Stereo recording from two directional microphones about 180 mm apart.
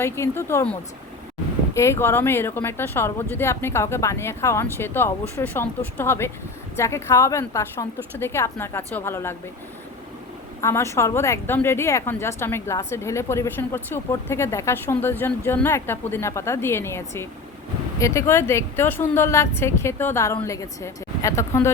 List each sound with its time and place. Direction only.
0.0 s speech: 15° left (ahead or behind)
10.6 s speech: 15° left (ahead or behind)